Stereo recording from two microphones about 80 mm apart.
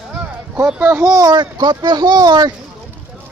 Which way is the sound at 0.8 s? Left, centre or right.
Right.